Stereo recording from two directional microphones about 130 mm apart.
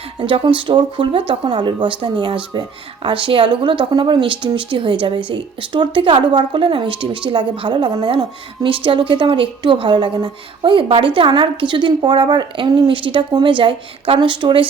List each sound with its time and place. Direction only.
0.2 s a woman's voice: 40° right (ahead or behind)